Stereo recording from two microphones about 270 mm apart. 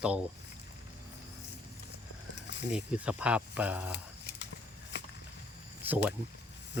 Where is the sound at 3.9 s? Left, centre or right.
Left.